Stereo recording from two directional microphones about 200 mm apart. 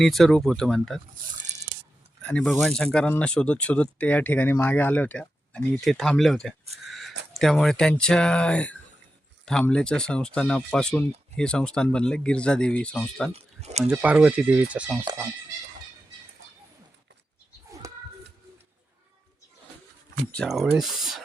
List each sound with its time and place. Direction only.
0.0 s speech: centre (ahead or behind)
2.2 s speech: 5° left (ahead or behind)
6.8 s a sound: centre (ahead or behind)
7.3 s speech: centre (ahead or behind)
13.3 s speech: 35° right (ahead or behind)
13.9 s speech: 10° right (ahead or behind)
17.8 s a sound: 15° right (ahead or behind)
20.3 s speech: centre (ahead or behind)